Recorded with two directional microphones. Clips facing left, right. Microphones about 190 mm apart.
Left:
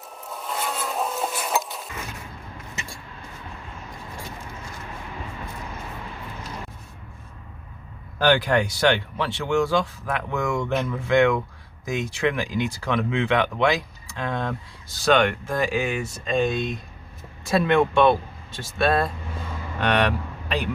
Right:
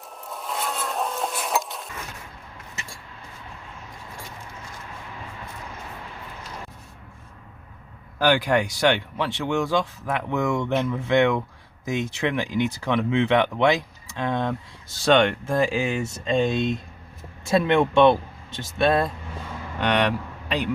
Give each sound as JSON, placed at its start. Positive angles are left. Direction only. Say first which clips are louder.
{"t": 0.2, "sound": "rub", "louder": "even", "side_deg": 0}
{"t": 8.2, "sound": "speech", "louder": "left 1 dB", "side_deg": -10}